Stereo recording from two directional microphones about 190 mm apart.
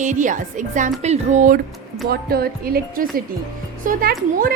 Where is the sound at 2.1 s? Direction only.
55° right (ahead or behind).